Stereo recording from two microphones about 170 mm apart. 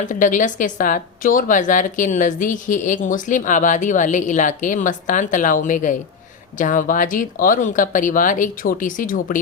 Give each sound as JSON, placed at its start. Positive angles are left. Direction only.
{"t": 0.0, "sound": "speech", "side_deg": 50}